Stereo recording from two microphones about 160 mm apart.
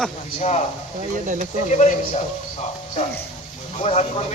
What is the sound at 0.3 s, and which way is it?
Speech, 45° left (ahead or behind).